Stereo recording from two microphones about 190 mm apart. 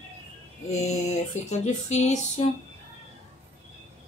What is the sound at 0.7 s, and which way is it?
Speech, 35° left (ahead or behind).